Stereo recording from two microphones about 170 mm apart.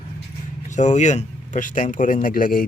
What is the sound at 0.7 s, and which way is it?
Speech, 45° left (ahead or behind).